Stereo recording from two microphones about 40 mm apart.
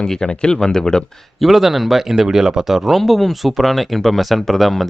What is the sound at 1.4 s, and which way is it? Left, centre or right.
Speech, centre.